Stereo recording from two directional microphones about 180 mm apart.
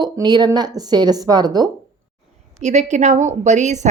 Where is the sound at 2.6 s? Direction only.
40° right (ahead or behind).